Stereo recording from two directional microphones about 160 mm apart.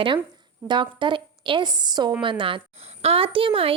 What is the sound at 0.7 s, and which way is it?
A woman's voice, 30° right (ahead or behind).